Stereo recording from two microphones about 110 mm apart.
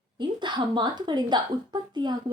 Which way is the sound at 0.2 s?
45° right (ahead or behind).